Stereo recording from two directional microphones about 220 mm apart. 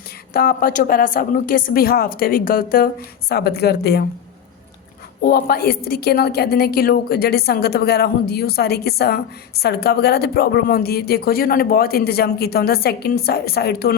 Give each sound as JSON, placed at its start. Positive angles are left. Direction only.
{"t": 0.3, "sound": "a woman's voice", "side_deg": 40}
{"t": 5.2, "sound": "a woman's voice", "side_deg": 40}